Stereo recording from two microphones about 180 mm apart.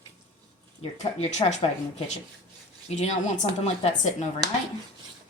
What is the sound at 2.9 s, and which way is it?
A woman's voice, 40° left (ahead or behind).